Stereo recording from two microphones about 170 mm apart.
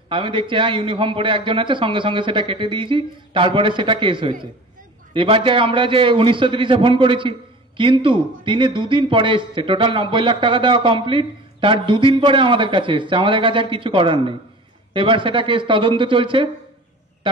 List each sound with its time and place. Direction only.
0.1 s a man's voice: 30° right (ahead or behind)